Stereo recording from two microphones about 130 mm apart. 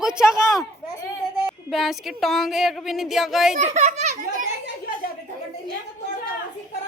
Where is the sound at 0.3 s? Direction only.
25° left (ahead or behind).